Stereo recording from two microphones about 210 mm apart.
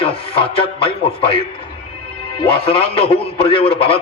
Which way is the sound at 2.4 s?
25° left (ahead or behind).